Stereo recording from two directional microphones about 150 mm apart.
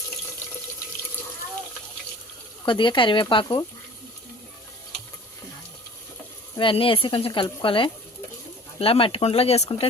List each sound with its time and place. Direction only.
2.6 s speech: 35° left (ahead or behind)
6.6 s speech: 35° left (ahead or behind)